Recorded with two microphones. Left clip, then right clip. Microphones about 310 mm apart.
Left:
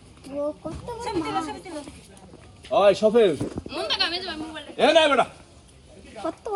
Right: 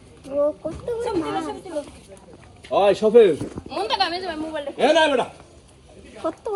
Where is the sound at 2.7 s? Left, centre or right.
Centre.